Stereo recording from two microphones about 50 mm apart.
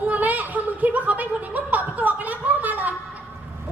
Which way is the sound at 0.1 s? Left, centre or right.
Right.